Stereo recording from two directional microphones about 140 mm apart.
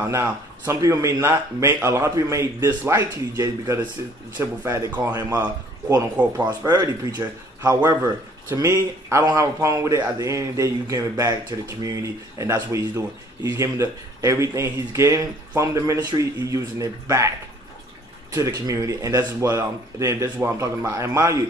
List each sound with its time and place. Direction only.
0.0 s speech: 20° right (ahead or behind)
6.2 s speech: 10° right (ahead or behind)
18.3 s speech: 25° right (ahead or behind)